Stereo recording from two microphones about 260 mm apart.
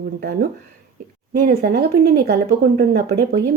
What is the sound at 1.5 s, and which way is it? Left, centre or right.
A woman's voice, right.